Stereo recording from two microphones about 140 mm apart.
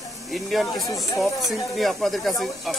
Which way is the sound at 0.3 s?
Centre (ahead or behind).